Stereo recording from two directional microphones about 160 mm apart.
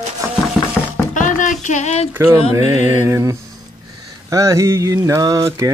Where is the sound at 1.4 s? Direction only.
50° left (ahead or behind).